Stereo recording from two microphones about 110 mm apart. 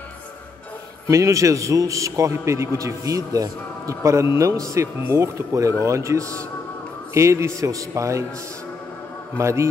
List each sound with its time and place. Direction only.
1.0 s a man's voice: 30° right (ahead or behind)
9.4 s a man's voice: 25° right (ahead or behind)